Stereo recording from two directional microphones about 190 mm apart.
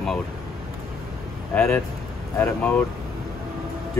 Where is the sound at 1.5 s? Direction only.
5° left (ahead or behind).